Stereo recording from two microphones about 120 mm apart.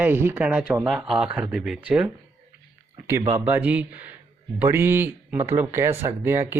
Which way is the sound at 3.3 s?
15° right (ahead or behind).